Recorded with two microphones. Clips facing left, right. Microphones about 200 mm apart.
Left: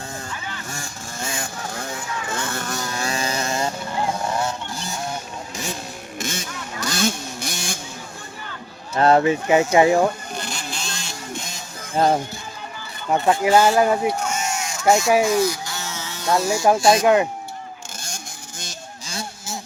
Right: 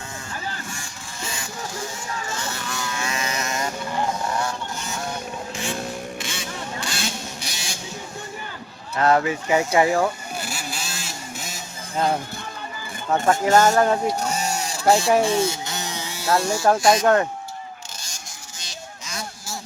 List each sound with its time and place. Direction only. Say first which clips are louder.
0.7 s vehicle: left 4 dB; 45° left (ahead or behind)
6.1 s vehicle: left 2 dB; 45° left (ahead or behind)
9.0 s speech: left 4 dB; 30° left (ahead or behind)
10.3 s vehicle: even; 5° right (ahead or behind)
12.0 s speech: left 4 dB; 40° left (ahead or behind)
13.1 s speech: left 1 dB; 15° left (ahead or behind)
14.2 s a sound: even; 35° right (ahead or behind); by 16.6 s centre (ahead or behind)
16.6 s speech: left 2 dB; 10° left (ahead or behind)
19.0 s a sound: left 3 dB; 30° left (ahead or behind)